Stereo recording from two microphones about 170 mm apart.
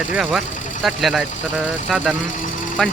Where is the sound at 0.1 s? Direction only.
5° right (ahead or behind).